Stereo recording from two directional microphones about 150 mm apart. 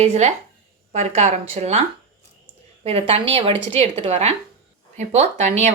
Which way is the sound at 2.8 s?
40° right (ahead or behind).